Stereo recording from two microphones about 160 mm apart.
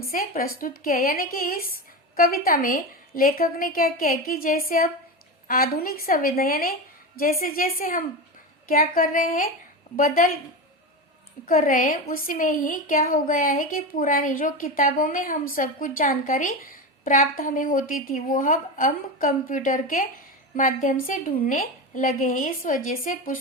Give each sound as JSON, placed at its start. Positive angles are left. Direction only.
{"t": 0.0, "sound": "a woman's voice", "side_deg": 60}
{"t": 11.4, "sound": "a woman's voice", "side_deg": 60}